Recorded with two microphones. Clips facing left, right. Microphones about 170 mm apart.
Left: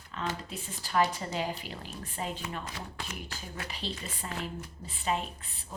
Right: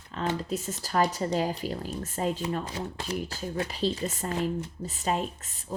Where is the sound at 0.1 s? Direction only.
35° right (ahead or behind).